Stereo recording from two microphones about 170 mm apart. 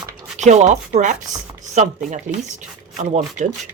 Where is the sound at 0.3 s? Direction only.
45° right (ahead or behind).